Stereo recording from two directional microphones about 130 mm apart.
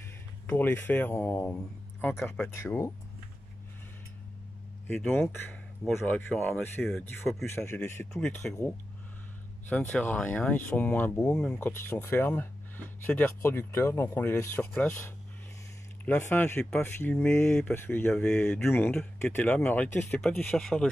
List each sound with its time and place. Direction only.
0.5 s speech: 15° left (ahead or behind)
4.8 s speech: 15° left (ahead or behind)
6.9 s speech: 5° left (ahead or behind)
7.4 s speech: 20° left (ahead or behind)
9.7 s speech: 15° left (ahead or behind)
11.7 s speech: 15° left (ahead or behind)